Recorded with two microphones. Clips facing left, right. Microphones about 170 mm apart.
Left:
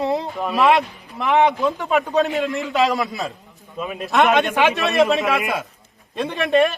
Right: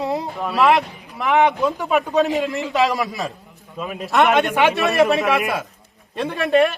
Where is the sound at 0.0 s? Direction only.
Centre (ahead or behind).